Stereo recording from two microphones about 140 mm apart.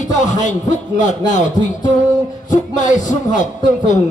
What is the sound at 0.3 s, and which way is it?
Speech, 60° left (ahead or behind).